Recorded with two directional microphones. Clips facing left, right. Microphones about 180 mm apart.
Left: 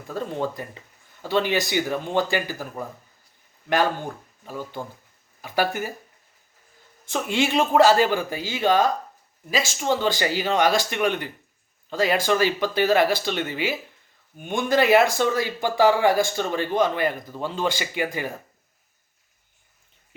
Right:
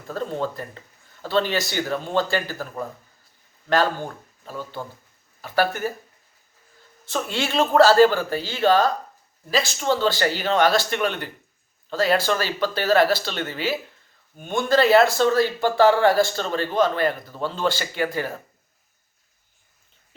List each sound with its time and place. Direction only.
0.1 s speech: 15° left (ahead or behind)
4.4 s speech: 15° left (ahead or behind)
7.1 s speech: 15° left (ahead or behind)